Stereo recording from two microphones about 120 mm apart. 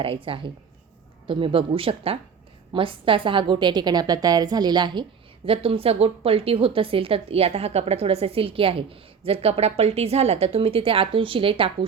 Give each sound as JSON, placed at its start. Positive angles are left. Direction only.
{"t": 0.0, "sound": "a woman's voice", "side_deg": -50}
{"t": 5.5, "sound": "a woman's voice", "side_deg": -50}